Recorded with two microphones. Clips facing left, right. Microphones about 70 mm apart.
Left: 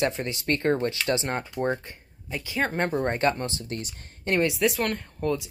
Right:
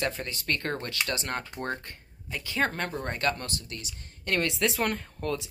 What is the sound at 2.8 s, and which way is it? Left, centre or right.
Speech, left.